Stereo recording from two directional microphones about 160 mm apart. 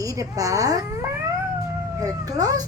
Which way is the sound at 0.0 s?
20° right (ahead or behind).